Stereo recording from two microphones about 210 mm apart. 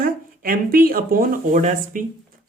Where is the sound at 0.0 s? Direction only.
45° right (ahead or behind).